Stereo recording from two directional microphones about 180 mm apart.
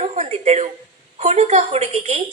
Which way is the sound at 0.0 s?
35° right (ahead or behind).